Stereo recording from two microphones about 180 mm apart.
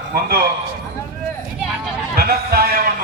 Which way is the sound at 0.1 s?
60° right (ahead or behind).